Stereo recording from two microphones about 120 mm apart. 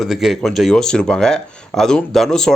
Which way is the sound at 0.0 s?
5° right (ahead or behind).